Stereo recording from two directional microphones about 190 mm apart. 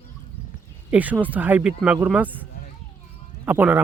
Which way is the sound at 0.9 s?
10° right (ahead or behind).